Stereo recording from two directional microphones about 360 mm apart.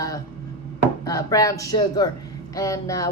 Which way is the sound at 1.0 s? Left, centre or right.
Centre.